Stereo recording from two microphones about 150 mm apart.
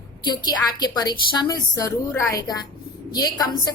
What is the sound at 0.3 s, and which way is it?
A woman's voice, 25° left (ahead or behind).